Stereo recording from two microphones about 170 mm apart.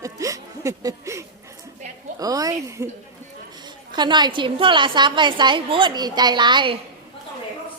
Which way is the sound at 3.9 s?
25° right (ahead or behind).